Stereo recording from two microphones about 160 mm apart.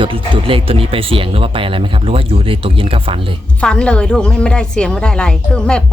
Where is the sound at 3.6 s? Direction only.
5° left (ahead or behind).